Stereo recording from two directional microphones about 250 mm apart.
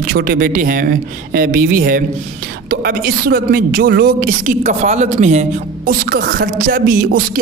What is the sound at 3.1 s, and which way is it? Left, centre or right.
Speech, right.